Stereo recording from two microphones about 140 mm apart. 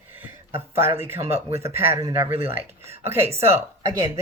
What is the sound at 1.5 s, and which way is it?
Speech, 45° right (ahead or behind).